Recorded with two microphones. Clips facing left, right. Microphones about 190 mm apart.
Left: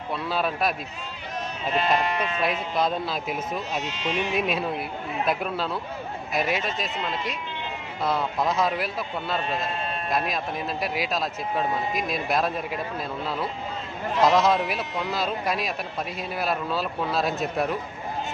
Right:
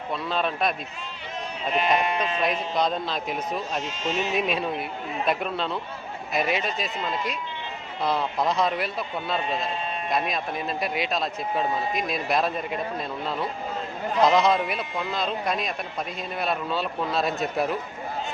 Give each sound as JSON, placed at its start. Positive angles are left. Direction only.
{"t": 0.1, "sound": "a man's voice", "side_deg": 5}
{"t": 2.4, "sound": "a man's voice", "side_deg": 5}
{"t": 3.8, "sound": "speech", "side_deg": -45}
{"t": 4.4, "sound": "a man's voice", "side_deg": 0}
{"t": 14.2, "sound": "a man's voice", "side_deg": 0}